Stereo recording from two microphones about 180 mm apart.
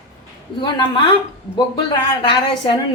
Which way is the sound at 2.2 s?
25° left (ahead or behind).